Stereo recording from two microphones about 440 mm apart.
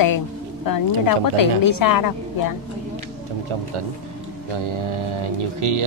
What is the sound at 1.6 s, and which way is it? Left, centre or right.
Speech, left.